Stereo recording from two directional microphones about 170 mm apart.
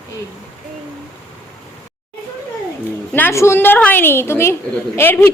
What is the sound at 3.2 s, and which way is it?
A woman's voice, 15° left (ahead or behind).